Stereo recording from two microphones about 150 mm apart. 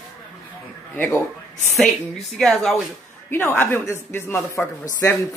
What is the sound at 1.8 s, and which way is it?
Speech, centre (ahead or behind).